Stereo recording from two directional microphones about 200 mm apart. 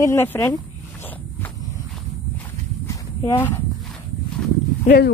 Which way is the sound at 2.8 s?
15° left (ahead or behind).